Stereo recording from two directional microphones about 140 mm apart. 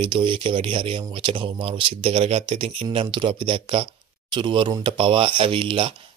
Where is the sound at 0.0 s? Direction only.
35° right (ahead or behind).